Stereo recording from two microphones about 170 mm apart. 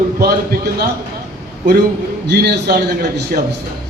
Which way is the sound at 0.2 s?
65° right (ahead or behind).